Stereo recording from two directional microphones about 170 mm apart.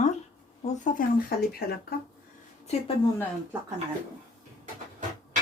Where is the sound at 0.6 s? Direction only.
50° left (ahead or behind).